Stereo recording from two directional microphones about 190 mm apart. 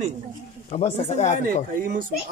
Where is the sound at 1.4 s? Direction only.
50° right (ahead or behind).